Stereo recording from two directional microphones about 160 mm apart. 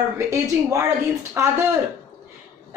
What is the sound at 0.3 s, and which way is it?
Speech, 20° right (ahead or behind).